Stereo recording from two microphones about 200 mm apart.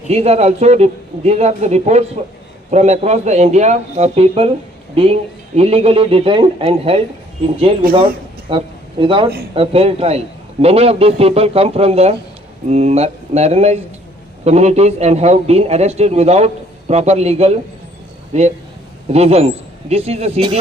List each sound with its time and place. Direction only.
0.1 s a man's voice: 30° right (ahead or behind)
5.5 s speech: 30° right (ahead or behind)
8.4 s a man's voice: 25° right (ahead or behind)